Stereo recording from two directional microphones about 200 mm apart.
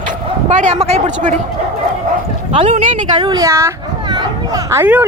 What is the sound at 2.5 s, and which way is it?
Speech, 30° right (ahead or behind).